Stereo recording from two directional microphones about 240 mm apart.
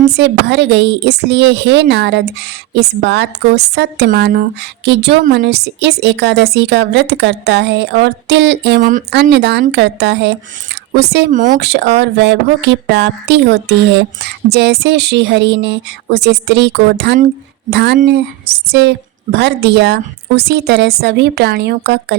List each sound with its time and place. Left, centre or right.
0.1 s a woman's voice: right